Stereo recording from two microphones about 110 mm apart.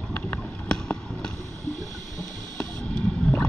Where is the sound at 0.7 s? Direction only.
5° left (ahead or behind).